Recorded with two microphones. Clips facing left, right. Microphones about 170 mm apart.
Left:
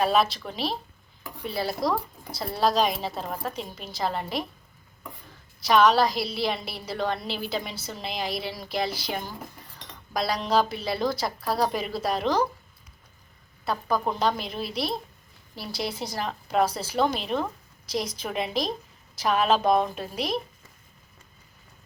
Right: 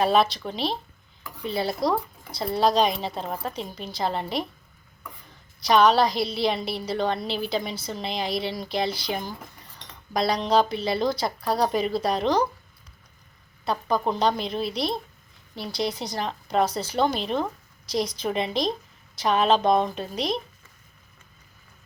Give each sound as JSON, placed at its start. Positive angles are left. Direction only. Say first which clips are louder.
{"t": 0.0, "sound": "a woman's voice", "louder": "right 2 dB", "side_deg": 0}
{"t": 5.5, "sound": "a woman's voice", "louder": "right 1 dB", "side_deg": 0}
{"t": 13.7, "sound": "a woman's voice", "louder": "right 2 dB", "side_deg": 0}